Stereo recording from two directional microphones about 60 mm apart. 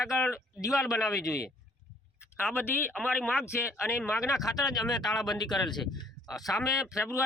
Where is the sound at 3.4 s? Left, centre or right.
Left.